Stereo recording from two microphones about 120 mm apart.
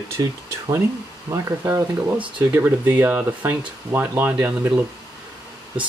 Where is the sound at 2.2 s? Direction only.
10° right (ahead or behind).